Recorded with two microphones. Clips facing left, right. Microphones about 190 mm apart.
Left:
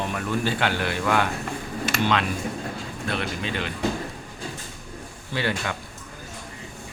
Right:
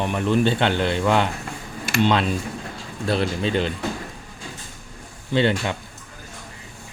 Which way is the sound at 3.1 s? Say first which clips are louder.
Right 7 dB; 35° right (ahead or behind).